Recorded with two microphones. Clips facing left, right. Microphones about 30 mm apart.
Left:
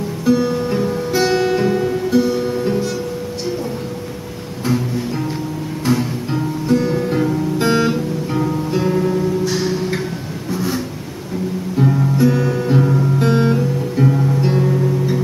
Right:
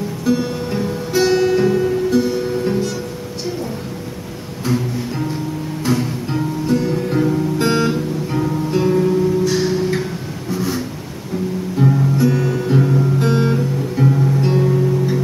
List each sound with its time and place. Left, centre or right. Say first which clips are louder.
0.2 s music: left 4 dB; centre
4.6 s music: left 1 dB; centre
6.8 s music: left 1 dB; centre
7.1 s guitar: right 1 dB; centre
10.5 s a sound: even; centre
11.7 s guitar: even; centre